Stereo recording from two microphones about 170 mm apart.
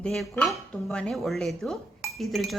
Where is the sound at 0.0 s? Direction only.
5° left (ahead or behind).